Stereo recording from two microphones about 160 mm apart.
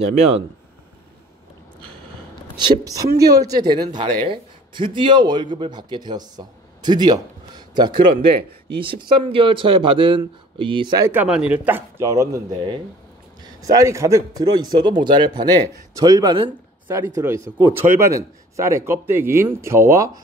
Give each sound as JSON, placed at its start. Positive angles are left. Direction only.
{"t": 0.0, "sound": "speech", "side_deg": -40}
{"t": 2.5, "sound": "a man's voice", "side_deg": -25}
{"t": 11.1, "sound": "a man's voice", "side_deg": -10}
{"t": 16.8, "sound": "speech", "side_deg": -15}
{"t": 17.8, "sound": "a man's voice", "side_deg": -65}
{"t": 18.1, "sound": "speech", "side_deg": -20}